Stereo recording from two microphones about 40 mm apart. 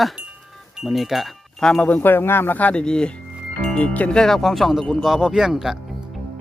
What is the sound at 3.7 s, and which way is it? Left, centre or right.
Speech, left.